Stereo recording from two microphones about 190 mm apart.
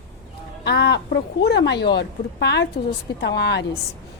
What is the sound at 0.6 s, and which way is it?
Speech, 65° left (ahead or behind).